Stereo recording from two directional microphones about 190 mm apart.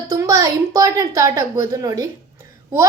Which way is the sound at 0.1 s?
15° right (ahead or behind).